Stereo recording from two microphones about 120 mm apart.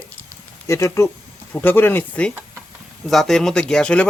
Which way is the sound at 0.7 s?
25° left (ahead or behind).